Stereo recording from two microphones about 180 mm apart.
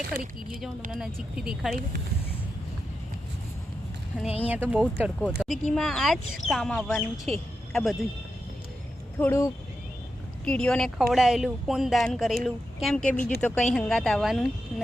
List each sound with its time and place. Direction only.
0.1 s speech: 55° right (ahead or behind)
0.9 s speech: 5° right (ahead or behind)
4.4 s speech: 10° right (ahead or behind)
9.1 s speech: 15° left (ahead or behind)
10.4 s speech: 5° left (ahead or behind)